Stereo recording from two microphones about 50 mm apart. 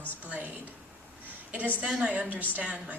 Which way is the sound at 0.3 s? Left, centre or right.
Right.